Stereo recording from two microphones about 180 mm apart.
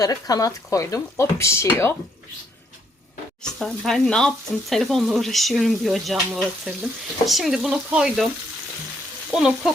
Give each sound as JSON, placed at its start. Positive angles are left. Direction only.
{"t": 0.0, "sound": "speech", "side_deg": 20}
{"t": 3.4, "sound": "speech", "side_deg": 0}
{"t": 9.3, "sound": "speech", "side_deg": -5}